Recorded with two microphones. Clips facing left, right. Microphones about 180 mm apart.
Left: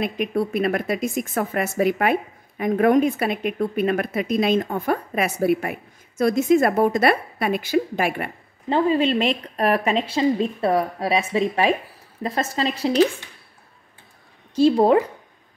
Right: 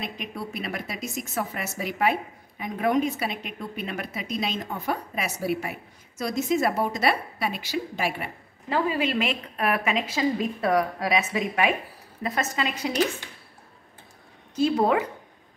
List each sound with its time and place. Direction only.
0.0 s speech: 55° left (ahead or behind)
8.6 s a woman's voice: 30° left (ahead or behind)
14.5 s a woman's voice: 30° left (ahead or behind)